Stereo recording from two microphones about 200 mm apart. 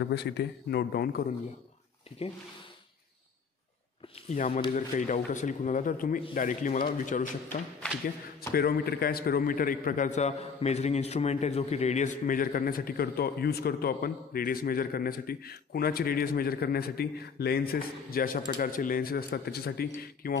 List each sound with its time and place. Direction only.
0.0 s a man's voice: 55° left (ahead or behind)
2.2 s a man's voice: 30° left (ahead or behind)
4.3 s a man's voice: 35° left (ahead or behind)
8.5 s a man's voice: 50° left (ahead or behind)